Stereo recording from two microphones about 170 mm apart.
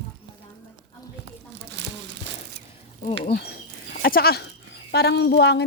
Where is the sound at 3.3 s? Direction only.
65° left (ahead or behind).